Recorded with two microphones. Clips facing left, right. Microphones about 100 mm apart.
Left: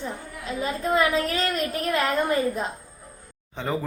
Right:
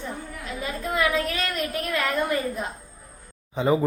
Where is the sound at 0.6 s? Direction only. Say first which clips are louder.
Left 3 dB; 30° left (ahead or behind).